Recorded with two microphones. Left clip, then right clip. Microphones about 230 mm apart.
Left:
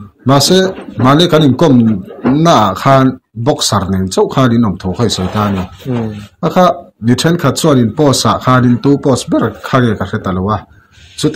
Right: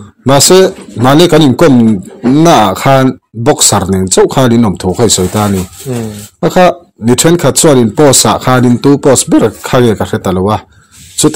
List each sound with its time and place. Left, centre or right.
0.3 s speech: right